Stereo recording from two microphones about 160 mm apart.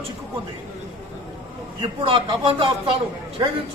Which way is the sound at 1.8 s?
35° right (ahead or behind).